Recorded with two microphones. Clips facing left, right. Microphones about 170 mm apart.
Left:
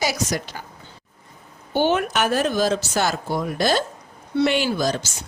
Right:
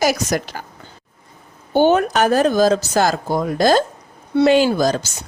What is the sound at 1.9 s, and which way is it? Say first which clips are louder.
Speech: right 5 dB; 40° right (ahead or behind).